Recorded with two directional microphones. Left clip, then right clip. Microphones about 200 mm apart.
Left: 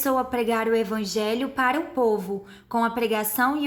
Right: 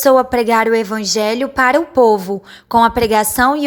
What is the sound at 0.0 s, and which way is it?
A woman's voice, 40° right (ahead or behind).